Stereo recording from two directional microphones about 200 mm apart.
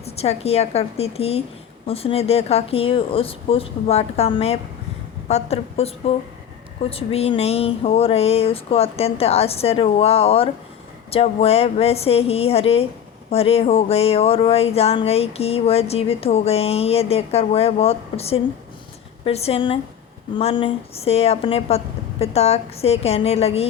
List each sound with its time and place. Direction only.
0.0 s speech: 30° left (ahead or behind)